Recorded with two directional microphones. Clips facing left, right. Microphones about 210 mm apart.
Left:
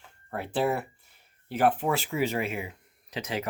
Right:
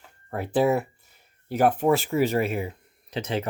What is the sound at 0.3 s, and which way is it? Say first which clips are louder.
Speech: right 5 dB; 45° right (ahead or behind).